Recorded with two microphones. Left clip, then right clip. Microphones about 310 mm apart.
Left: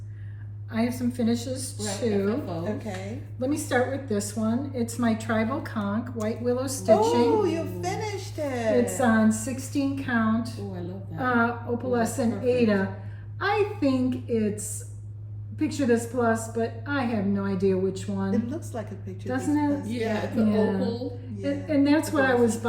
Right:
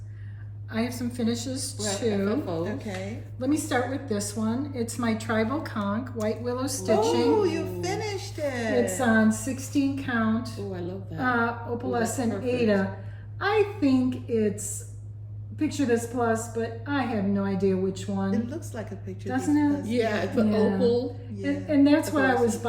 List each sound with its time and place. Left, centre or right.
0.7 s a woman's voice: centre
2.6 s a woman's voice: centre
3.3 s a woman's voice: centre
7.4 s a woman's voice: centre
15.5 s a woman's voice: centre
19.9 s a woman's voice: centre
20.5 s a woman's voice: centre